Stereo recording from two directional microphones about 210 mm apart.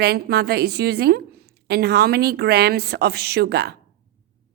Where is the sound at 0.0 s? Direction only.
50° right (ahead or behind).